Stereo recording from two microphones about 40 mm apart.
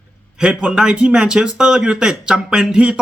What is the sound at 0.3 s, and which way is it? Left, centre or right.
A man's voice, right.